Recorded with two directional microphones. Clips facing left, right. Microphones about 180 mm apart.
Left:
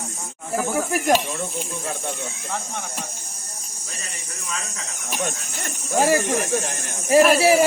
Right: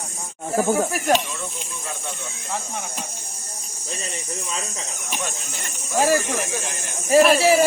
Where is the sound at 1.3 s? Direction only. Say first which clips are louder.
Left 5 dB; 50° left (ahead or behind).